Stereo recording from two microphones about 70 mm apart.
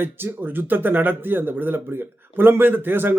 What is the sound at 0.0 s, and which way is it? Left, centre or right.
Speech, right.